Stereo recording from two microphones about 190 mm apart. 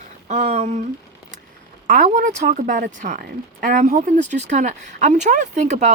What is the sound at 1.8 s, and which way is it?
Speech, 45° right (ahead or behind).